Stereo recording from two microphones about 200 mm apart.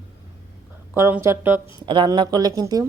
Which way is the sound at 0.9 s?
10° right (ahead or behind).